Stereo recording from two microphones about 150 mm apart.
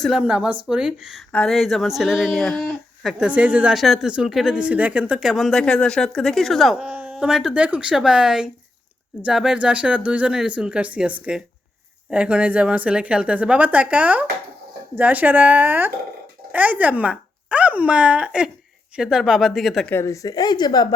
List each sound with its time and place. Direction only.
0.0 s speech: 5° right (ahead or behind)
19.9 s a woman's voice: 20° left (ahead or behind)